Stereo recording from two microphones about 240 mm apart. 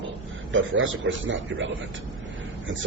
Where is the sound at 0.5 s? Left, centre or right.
Right.